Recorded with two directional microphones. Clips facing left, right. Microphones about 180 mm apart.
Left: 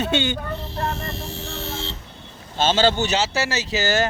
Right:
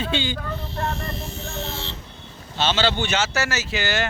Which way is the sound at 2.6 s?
45° left (ahead or behind).